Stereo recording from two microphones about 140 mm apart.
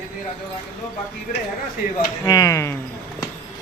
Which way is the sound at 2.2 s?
25° left (ahead or behind).